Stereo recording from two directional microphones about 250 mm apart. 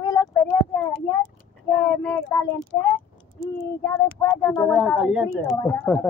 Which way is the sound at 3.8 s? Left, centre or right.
Centre.